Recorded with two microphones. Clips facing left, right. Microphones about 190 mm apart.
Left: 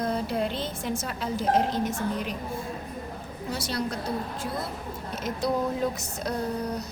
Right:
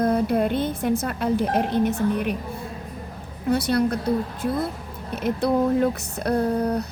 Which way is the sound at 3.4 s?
60° right (ahead or behind).